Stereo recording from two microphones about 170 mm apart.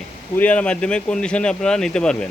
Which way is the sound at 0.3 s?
10° left (ahead or behind).